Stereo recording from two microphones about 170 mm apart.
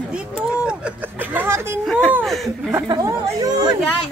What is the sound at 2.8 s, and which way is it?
Speech, 20° right (ahead or behind).